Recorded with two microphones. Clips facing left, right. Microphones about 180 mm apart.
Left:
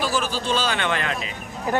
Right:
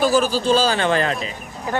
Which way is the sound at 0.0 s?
40° right (ahead or behind).